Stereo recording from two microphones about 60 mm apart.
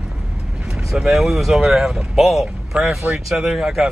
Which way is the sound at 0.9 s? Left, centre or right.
Centre.